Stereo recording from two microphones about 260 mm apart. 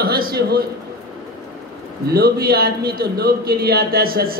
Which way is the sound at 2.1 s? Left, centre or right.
Right.